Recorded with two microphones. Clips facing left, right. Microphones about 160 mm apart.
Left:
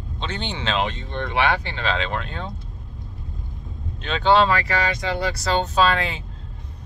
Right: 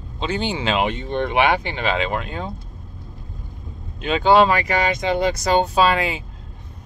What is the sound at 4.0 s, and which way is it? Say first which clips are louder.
Speech: right 3 dB; 10° right (ahead or behind).